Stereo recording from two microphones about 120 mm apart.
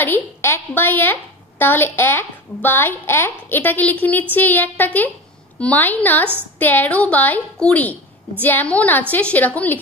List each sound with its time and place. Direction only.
0.0 s a woman's voice: 20° left (ahead or behind)